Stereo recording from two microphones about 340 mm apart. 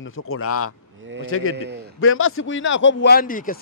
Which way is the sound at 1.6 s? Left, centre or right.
Right.